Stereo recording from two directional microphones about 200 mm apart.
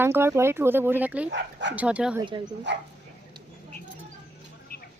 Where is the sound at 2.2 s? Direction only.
20° right (ahead or behind).